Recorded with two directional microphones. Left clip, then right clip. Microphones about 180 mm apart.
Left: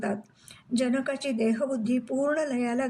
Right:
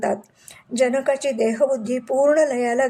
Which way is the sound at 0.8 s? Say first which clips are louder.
Right 10 dB; 15° left (ahead or behind).